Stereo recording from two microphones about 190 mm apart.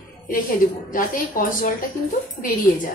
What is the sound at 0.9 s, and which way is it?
Speech, 45° left (ahead or behind).